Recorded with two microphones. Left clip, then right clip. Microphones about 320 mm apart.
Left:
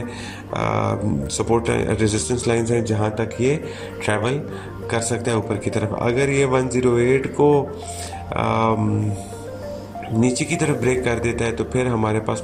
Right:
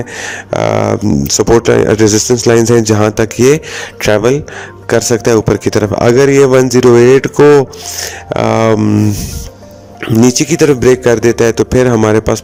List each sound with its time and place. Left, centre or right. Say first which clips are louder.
0.2 s speech: right 13 dB; right
10.2 s speech: right 13 dB; right